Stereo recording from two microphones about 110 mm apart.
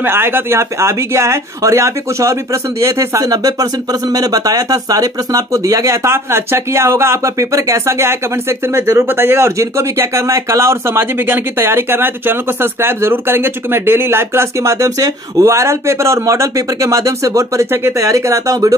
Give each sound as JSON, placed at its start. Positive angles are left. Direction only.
{"t": 0.0, "sound": "speech", "side_deg": -20}